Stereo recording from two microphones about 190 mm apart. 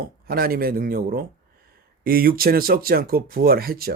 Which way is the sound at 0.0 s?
50° right (ahead or behind).